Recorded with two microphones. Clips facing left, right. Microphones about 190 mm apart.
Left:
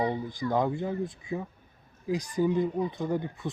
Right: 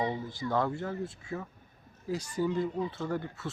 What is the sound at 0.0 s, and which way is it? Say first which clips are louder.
Speech: left 3 dB; 15° left (ahead or behind).